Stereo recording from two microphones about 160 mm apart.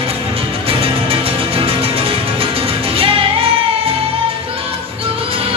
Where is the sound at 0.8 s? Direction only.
35° right (ahead or behind).